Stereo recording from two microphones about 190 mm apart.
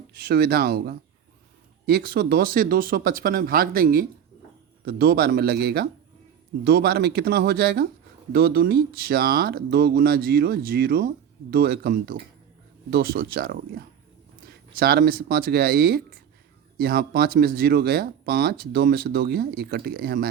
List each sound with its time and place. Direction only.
0.1 s speech: 55° right (ahead or behind)